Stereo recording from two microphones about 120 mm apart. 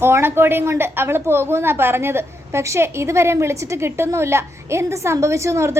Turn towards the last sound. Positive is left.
turn(degrees=-25)  # may be behind; listen again after turning